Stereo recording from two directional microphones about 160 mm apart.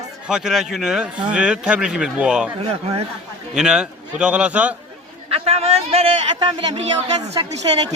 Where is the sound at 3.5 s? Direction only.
5° right (ahead or behind).